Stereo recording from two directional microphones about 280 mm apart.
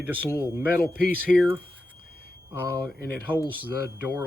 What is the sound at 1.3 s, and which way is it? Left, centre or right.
Speech, centre.